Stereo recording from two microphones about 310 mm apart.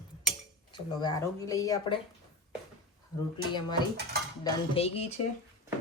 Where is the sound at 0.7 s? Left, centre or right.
Centre.